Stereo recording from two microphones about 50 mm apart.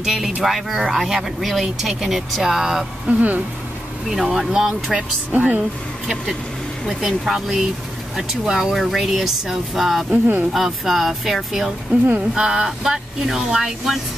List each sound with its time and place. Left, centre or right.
0.0 s speech: centre
3.1 s speech: right
4.1 s speech: centre
5.3 s speech: right
6.9 s speech: centre
10.1 s speech: right
10.5 s speech: centre
12.4 s speech: centre